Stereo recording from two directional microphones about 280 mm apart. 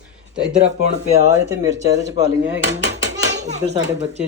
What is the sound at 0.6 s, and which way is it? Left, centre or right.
Speech, right.